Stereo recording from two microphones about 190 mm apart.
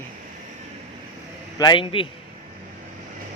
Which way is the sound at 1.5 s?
25° left (ahead or behind).